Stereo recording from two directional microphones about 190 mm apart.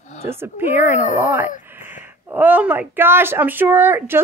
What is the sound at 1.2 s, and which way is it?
A woman's voice, 10° right (ahead or behind).